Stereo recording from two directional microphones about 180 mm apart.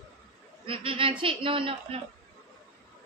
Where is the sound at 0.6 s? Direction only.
30° right (ahead or behind).